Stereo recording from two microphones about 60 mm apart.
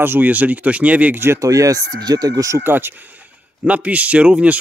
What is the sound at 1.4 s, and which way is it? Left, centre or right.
Speech, right.